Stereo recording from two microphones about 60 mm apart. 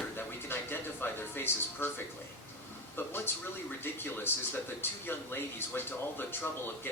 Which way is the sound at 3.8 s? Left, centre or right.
Left.